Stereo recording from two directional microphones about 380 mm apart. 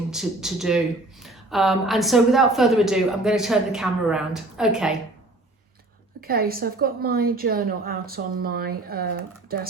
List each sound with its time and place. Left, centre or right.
0.1 s a woman's voice: centre
6.1 s a woman's voice: right